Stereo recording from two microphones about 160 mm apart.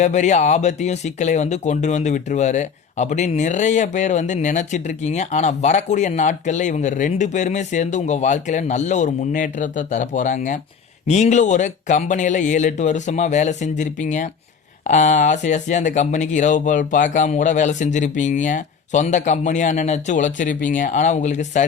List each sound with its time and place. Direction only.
0.0 s speech: 50° left (ahead or behind)